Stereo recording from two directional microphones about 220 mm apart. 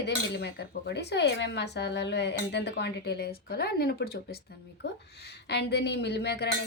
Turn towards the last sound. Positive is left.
turn(degrees=50)  # may be behind; listen again after turning